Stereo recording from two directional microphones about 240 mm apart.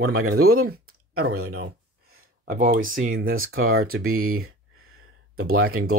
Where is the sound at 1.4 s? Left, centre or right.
Right.